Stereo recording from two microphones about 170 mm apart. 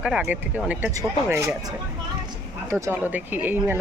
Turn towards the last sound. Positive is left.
turn(degrees=-10)  # may be behind; listen again after turning